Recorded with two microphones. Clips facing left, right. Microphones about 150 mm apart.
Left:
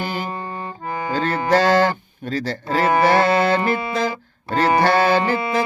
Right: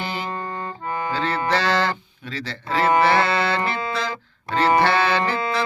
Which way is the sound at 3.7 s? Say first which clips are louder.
Left 5 dB; 45° left (ahead or behind).